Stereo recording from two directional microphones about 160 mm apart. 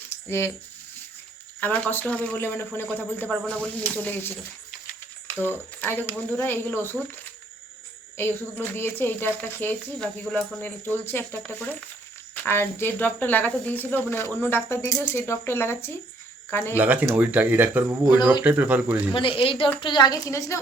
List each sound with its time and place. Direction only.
0.1 s a sound: 15° left (ahead or behind)
1.6 s speech: 10° left (ahead or behind)
8.1 s speech: 15° left (ahead or behind)
16.7 s speech: 10° right (ahead or behind)
19.1 s a woman's voice: 35° left (ahead or behind)